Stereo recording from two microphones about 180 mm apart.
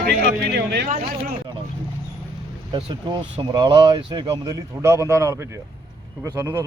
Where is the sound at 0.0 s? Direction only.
65° right (ahead or behind).